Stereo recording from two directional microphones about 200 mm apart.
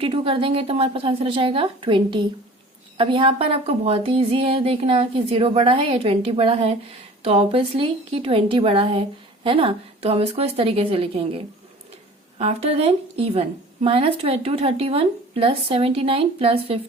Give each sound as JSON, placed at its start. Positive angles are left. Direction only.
{"t": 0.0, "sound": "a woman's voice", "side_deg": -25}